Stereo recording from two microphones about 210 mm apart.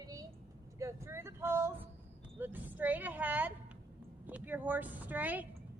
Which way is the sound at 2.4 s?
10° right (ahead or behind).